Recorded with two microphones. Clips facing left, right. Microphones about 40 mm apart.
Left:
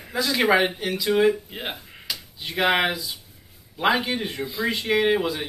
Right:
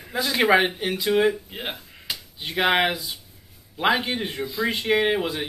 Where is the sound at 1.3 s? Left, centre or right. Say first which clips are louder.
Left 1 dB; centre.